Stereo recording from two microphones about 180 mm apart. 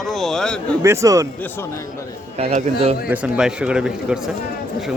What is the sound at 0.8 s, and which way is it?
Speech, 15° right (ahead or behind).